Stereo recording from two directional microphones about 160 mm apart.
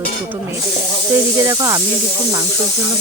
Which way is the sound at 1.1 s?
15° right (ahead or behind).